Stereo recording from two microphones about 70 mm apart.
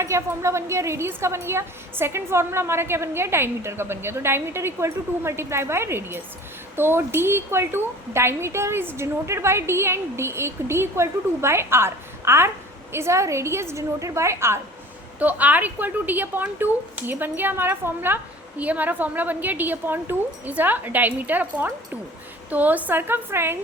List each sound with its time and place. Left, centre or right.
0.0 s a woman's voice: right
15.2 s speech: right